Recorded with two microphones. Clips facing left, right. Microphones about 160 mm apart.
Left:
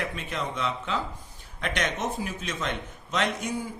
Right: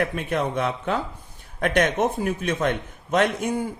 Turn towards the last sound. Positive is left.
turn(degrees=-55)  # may be behind; listen again after turning